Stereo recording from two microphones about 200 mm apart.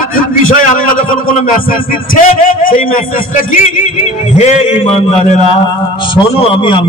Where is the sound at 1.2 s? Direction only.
45° left (ahead or behind).